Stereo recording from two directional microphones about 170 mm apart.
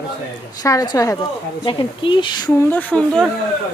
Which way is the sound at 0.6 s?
20° left (ahead or behind).